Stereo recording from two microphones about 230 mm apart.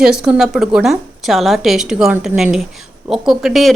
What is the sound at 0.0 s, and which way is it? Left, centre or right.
Speech, centre.